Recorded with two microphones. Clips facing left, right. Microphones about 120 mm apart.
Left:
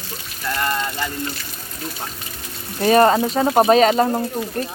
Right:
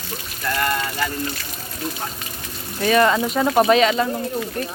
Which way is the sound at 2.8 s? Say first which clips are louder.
Left 3 dB; 40° left (ahead or behind).